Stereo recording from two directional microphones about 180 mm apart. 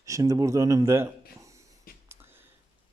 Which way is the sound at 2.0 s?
15° right (ahead or behind).